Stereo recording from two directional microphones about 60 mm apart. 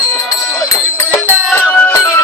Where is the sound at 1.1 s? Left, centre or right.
Left.